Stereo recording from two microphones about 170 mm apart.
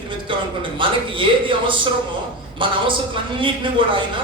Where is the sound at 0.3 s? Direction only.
30° right (ahead or behind).